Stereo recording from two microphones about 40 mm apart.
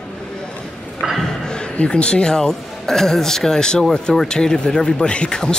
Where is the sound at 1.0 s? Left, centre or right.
Centre.